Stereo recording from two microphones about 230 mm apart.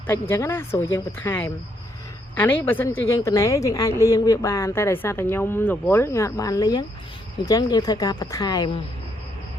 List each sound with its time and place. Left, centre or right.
0.1 s a woman's voice: centre